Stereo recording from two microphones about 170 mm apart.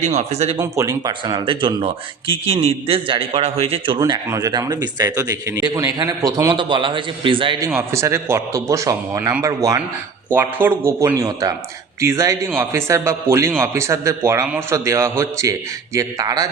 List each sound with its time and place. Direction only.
0.0 s speech: 40° right (ahead or behind)
0.6 s speech: 20° right (ahead or behind)
7.6 s a man's voice: 15° right (ahead or behind)